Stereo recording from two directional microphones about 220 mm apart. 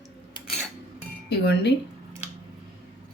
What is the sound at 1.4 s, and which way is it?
Speech, 50° left (ahead or behind).